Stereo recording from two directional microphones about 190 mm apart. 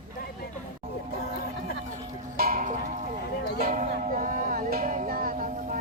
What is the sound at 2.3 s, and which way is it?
Music, 50° right (ahead or behind).